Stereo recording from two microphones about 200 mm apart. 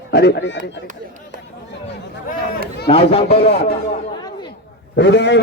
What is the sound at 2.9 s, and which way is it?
Speech, 30° left (ahead or behind).